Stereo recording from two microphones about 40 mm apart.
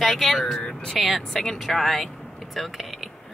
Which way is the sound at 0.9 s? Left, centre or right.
Centre.